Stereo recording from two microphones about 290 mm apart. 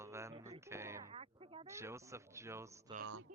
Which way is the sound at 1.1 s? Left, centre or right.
Centre.